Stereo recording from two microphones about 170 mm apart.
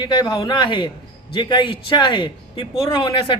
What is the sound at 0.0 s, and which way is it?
Speech, 25° left (ahead or behind).